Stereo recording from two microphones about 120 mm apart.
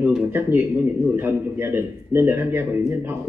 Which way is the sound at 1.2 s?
20° right (ahead or behind).